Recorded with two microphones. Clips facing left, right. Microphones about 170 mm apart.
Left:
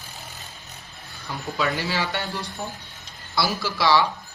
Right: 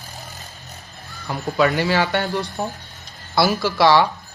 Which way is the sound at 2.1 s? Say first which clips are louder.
Right 7 dB; 45° right (ahead or behind).